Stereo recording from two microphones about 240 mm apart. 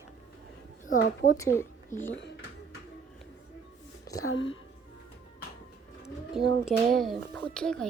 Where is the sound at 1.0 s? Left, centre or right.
Left.